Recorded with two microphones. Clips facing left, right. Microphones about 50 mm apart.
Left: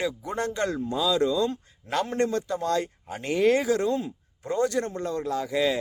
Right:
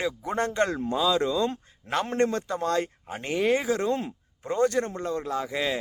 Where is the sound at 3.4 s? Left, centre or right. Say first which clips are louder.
Left 3 dB; centre.